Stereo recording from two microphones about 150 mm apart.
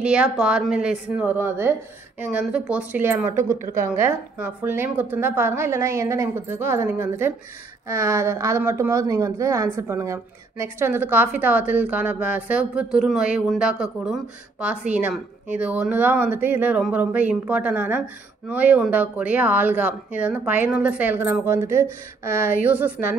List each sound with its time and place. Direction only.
0.0 s a woman's voice: 5° right (ahead or behind)